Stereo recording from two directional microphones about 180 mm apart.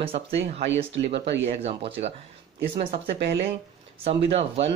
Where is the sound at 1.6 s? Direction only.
35° right (ahead or behind).